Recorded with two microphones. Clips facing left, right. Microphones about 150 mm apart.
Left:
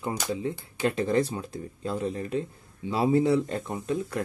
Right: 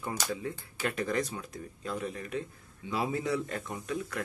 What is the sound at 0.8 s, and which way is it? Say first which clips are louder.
Speech: left 7 dB; 25° left (ahead or behind).